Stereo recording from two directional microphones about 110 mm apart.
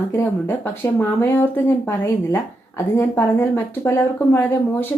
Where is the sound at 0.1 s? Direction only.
25° left (ahead or behind).